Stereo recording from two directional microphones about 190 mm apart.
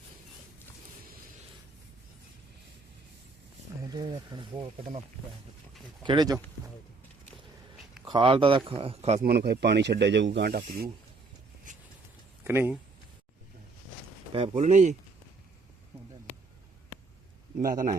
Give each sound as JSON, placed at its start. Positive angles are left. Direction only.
{"t": 3.8, "sound": "speech", "side_deg": -20}
{"t": 6.0, "sound": "speech", "side_deg": -25}
{"t": 8.1, "sound": "speech", "side_deg": -30}
{"t": 9.2, "sound": "speech", "side_deg": -55}
{"t": 12.5, "sound": "speech", "side_deg": -10}
{"t": 14.3, "sound": "speech", "side_deg": -35}
{"t": 17.6, "sound": "a man's voice", "side_deg": -50}